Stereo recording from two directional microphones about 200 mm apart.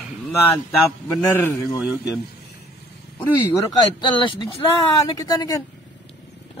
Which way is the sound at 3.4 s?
20° left (ahead or behind).